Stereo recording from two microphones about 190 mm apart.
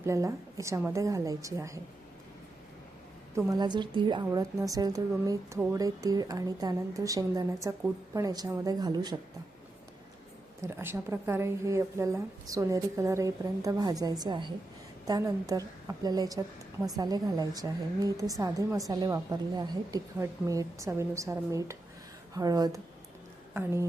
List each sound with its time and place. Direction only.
0.0 s a woman's voice: 15° right (ahead or behind)
3.3 s a woman's voice: 15° right (ahead or behind)
10.6 s a woman's voice: 15° right (ahead or behind)